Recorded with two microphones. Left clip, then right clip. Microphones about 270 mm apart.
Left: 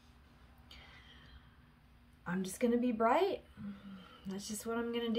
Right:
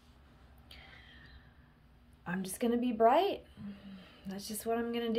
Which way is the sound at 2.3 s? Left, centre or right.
Centre.